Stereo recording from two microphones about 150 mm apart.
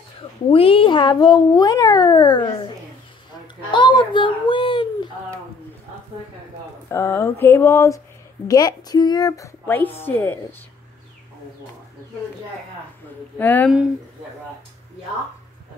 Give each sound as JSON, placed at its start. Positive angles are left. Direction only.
{"t": 0.5, "sound": "speech", "side_deg": 40}
{"t": 3.7, "sound": "a child's voice", "side_deg": 30}
{"t": 6.9, "sound": "speech", "side_deg": 15}
{"t": 9.7, "sound": "speech", "side_deg": 15}
{"t": 13.4, "sound": "speech", "side_deg": 10}